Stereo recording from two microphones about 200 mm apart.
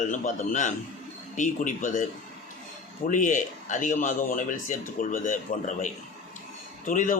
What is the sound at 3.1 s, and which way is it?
Speech, 40° left (ahead or behind).